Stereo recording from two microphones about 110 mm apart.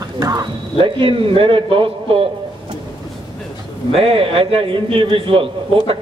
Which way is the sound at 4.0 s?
60° right (ahead or behind).